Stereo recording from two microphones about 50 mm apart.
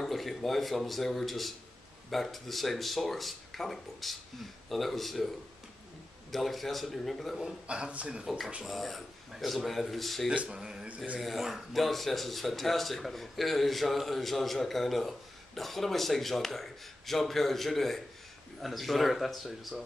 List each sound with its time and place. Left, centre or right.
0.0 s speech: centre
6.3 s speech: centre
7.6 s speech: right
8.6 s speech: centre
10.3 s speech: right
10.6 s a sound: centre
11.1 s speech: centre